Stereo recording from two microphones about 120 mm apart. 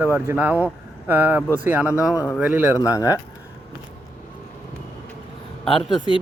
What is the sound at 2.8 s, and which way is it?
Speech, 30° left (ahead or behind).